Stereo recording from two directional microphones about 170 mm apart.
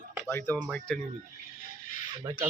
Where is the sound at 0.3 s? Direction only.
10° left (ahead or behind).